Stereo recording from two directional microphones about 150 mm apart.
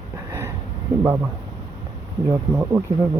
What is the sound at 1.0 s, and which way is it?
Speech, 15° right (ahead or behind).